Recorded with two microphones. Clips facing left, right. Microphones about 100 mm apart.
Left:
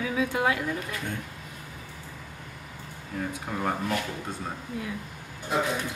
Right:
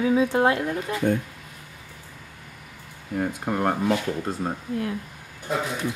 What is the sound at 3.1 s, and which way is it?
Speech, 60° right (ahead or behind).